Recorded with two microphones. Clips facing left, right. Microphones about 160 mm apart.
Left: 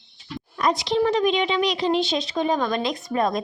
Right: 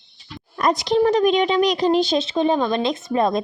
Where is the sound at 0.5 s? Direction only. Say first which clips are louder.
Right 3 dB; 45° right (ahead or behind).